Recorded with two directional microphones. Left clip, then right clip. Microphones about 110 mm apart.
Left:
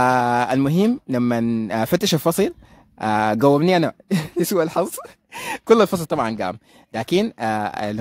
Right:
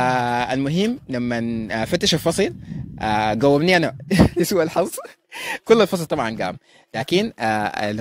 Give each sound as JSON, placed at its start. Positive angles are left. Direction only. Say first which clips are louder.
{"t": 0.0, "sound": "speech", "louder": "left 2 dB", "side_deg": 60}
{"t": 1.4, "sound": "a man's voice", "louder": "left 3 dB", "side_deg": 90}
{"t": 1.7, "sound": "speech", "louder": "right 1 dB", "side_deg": 55}
{"t": 3.5, "sound": "speech", "louder": "right 1 dB", "side_deg": 30}
{"t": 5.3, "sound": "speech", "louder": "even", "side_deg": 50}
{"t": 7.3, "sound": "speech", "louder": "right 1 dB", "side_deg": 25}